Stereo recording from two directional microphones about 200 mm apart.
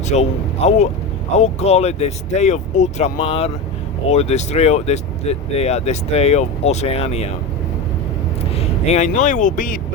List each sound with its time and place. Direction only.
0.1 s speech: 35° left (ahead or behind)
8.5 s speech: 30° left (ahead or behind)